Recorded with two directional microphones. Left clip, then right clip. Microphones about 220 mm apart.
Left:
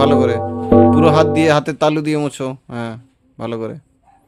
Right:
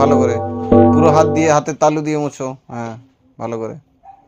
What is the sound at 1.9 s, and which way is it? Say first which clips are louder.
Speech: even; 30° left (ahead or behind).